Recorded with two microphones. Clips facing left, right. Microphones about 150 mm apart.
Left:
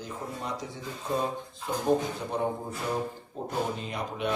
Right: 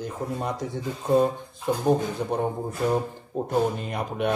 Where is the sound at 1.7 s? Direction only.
60° right (ahead or behind).